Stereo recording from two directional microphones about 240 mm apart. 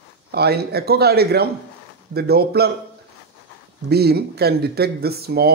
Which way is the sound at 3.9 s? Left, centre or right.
Right.